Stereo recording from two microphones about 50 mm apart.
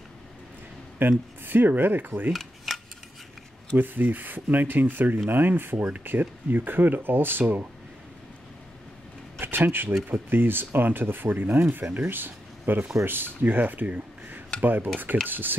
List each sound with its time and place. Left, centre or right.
1.0 s speech: right
2.3 s cutlery: centre
3.7 s speech: right
9.4 s speech: right